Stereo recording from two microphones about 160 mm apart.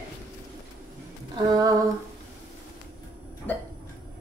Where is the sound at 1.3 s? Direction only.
25° right (ahead or behind).